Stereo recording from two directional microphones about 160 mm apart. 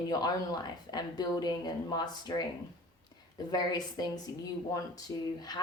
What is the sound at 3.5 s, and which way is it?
A woman's voice, 25° left (ahead or behind).